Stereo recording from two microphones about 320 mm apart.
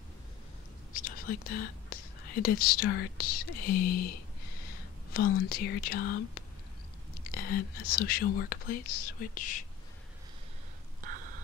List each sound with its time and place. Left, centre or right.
0.9 s speech: left
5.1 s speech: left